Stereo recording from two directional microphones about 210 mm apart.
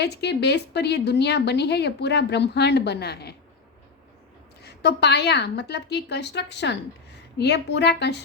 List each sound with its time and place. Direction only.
0.0 s a woman's voice: 55° left (ahead or behind)
4.6 s a woman's voice: 55° left (ahead or behind)